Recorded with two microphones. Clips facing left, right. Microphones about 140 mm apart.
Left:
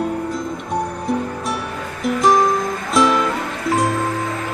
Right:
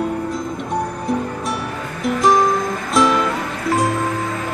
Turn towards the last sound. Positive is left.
turn(degrees=0)  # may be behind; listen again after turning